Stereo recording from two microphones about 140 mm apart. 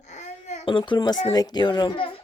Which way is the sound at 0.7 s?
35° left (ahead or behind).